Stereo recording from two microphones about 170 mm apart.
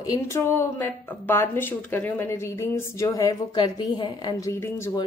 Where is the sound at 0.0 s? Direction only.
20° left (ahead or behind).